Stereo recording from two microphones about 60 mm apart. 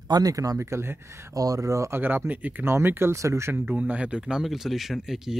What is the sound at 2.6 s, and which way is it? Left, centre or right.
Speech, right.